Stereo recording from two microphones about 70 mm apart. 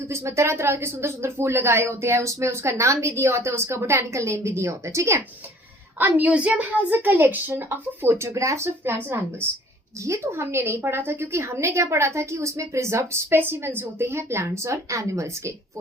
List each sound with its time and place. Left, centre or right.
0.1 s speech: right
6.0 s a woman's voice: right